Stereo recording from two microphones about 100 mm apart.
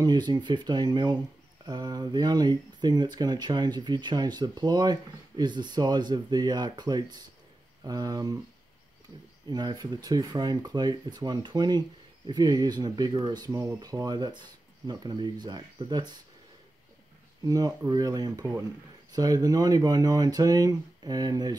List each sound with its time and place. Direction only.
0.0 s speech: 45° right (ahead or behind)
9.5 s speech: 45° right (ahead or behind)
13.5 s speech: 30° right (ahead or behind)
17.5 s speech: 40° right (ahead or behind)